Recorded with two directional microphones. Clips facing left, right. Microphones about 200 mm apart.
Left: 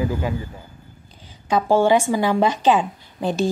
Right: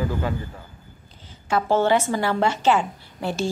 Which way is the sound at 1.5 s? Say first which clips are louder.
Left 3 dB; 15° left (ahead or behind).